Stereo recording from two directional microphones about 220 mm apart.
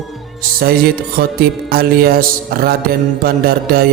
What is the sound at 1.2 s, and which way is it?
Music, 45° right (ahead or behind).